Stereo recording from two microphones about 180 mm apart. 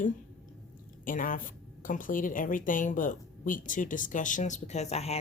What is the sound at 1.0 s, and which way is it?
A woman's voice, 50° left (ahead or behind).